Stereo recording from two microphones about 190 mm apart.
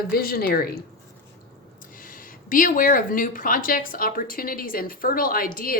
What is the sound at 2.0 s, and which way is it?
Speech, 45° left (ahead or behind).